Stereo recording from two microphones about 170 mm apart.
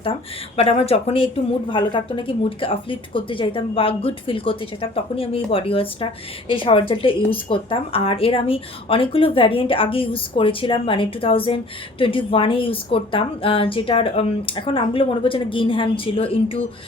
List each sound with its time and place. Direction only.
0.0 s speech: 35° left (ahead or behind)